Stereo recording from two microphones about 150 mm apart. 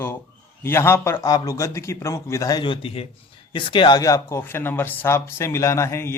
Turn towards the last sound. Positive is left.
turn(degrees=20)  # may be behind; listen again after turning